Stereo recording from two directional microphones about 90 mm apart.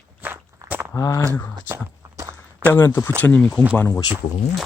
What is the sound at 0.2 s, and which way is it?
Walk, 20° right (ahead or behind).